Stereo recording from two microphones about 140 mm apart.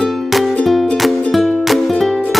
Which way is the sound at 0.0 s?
Centre (ahead or behind).